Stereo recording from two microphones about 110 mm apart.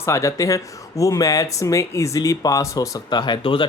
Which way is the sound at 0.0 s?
25° left (ahead or behind).